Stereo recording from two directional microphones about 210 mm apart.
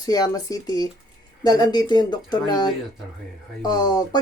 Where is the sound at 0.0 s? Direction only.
20° left (ahead or behind).